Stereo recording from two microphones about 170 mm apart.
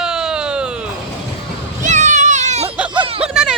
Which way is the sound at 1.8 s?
45° right (ahead or behind).